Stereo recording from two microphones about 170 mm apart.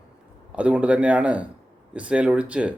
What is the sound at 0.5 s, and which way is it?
Speech, 5° right (ahead or behind).